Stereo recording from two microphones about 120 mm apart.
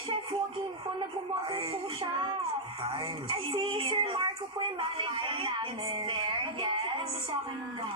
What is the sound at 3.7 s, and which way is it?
Speech, 45° right (ahead or behind).